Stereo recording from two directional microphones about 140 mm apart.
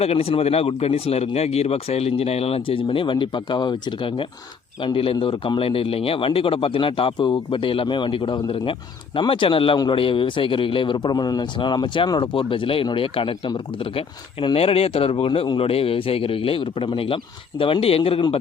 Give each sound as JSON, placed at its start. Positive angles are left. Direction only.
{"t": 0.0, "sound": "a man's voice", "side_deg": 45}